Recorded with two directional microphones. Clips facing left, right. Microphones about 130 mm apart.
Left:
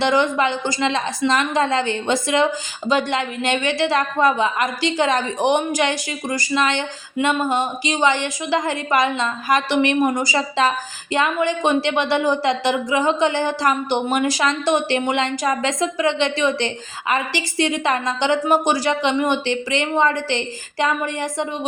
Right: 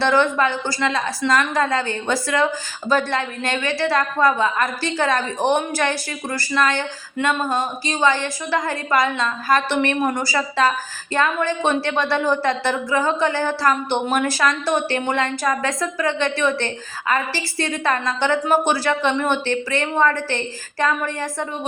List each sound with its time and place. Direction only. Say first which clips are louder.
0.0 s a woman's voice: even; 15° left (ahead or behind)